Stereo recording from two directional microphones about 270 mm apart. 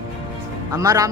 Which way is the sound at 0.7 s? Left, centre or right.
Centre.